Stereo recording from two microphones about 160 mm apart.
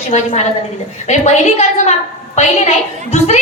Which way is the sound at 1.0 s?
45° left (ahead or behind).